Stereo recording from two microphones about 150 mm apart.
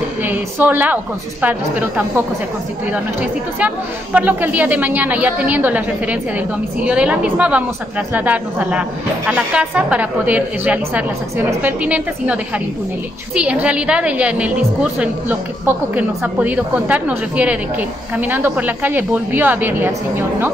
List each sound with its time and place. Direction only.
0.2 s a woman's voice: 10° right (ahead or behind)